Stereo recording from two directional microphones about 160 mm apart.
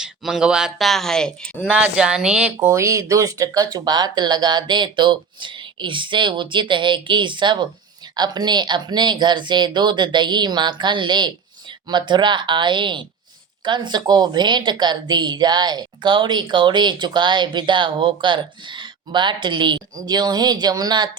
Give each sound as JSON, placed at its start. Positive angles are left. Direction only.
{"t": 0.0, "sound": "speech", "side_deg": -5}
{"t": 2.6, "sound": "a woman's voice", "side_deg": -20}